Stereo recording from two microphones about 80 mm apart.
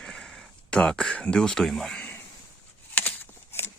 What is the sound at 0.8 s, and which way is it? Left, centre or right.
Speech, centre.